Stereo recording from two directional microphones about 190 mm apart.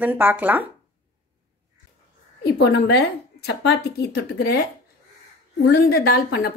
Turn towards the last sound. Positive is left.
turn(degrees=55)  # may be behind; listen again after turning